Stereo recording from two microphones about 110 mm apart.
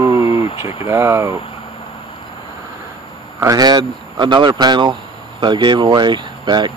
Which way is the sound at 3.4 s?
35° right (ahead or behind).